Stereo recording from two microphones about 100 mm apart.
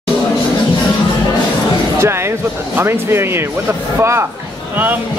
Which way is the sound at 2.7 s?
25° right (ahead or behind).